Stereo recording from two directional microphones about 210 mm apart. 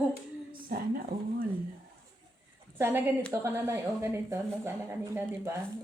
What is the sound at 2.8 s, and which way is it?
Speech, 10° right (ahead or behind).